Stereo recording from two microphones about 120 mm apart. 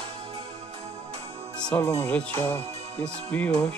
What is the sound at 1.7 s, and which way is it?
Speech, 20° left (ahead or behind).